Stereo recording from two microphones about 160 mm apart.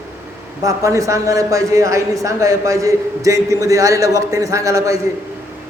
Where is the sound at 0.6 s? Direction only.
20° right (ahead or behind).